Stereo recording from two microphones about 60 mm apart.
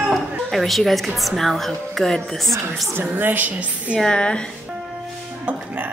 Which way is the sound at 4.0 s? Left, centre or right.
Centre.